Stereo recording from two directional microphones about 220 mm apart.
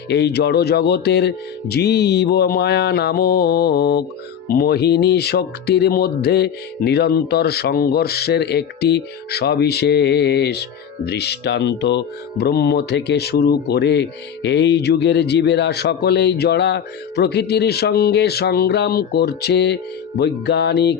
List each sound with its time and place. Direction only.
0.1 s speech: 50° left (ahead or behind)